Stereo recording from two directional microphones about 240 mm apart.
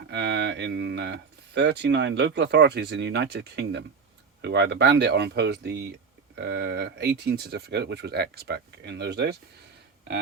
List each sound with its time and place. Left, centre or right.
0.1 s speech: right